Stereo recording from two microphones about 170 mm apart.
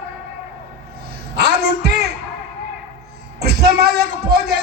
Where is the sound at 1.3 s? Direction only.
70° right (ahead or behind).